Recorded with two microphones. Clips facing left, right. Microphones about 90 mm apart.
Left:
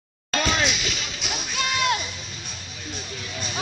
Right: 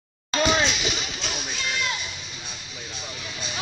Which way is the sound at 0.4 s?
25° right (ahead or behind).